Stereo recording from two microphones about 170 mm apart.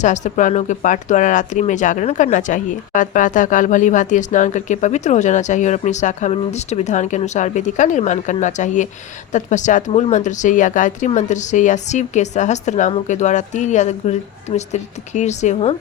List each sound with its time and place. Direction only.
0.0 s speech: 45° left (ahead or behind)